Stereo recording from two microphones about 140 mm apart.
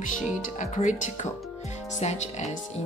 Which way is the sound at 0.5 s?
60° left (ahead or behind).